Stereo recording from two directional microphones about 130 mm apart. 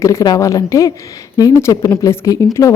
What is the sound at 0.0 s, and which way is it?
Speech, 25° left (ahead or behind).